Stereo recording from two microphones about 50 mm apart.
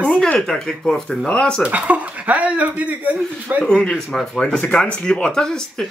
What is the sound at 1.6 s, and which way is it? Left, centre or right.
Speech, right.